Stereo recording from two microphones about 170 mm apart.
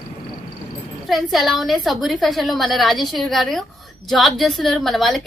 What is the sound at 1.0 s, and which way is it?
A woman's voice, centre (ahead or behind).